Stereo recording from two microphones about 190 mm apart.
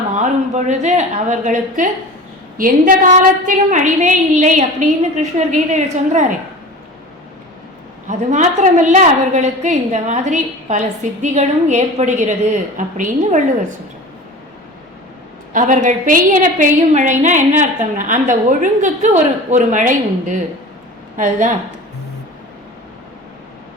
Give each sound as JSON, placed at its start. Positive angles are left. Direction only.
{"t": 0.2, "sound": "a woman's voice", "side_deg": -40}
{"t": 8.0, "sound": "a woman's voice", "side_deg": -40}
{"t": 15.5, "sound": "a woman's voice", "side_deg": -40}